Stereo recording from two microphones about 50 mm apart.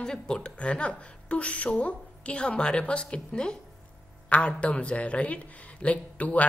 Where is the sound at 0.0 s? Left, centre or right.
Centre.